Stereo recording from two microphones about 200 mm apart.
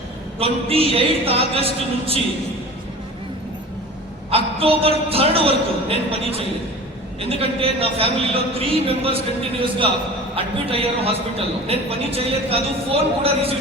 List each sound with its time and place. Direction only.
0.3 s a man's voice: 30° right (ahead or behind)
4.6 s a man's voice: 30° right (ahead or behind)